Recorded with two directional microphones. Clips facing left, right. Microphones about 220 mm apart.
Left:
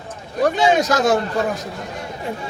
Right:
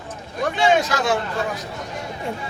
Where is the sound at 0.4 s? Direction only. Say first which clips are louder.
Left 3 dB; 40° left (ahead or behind).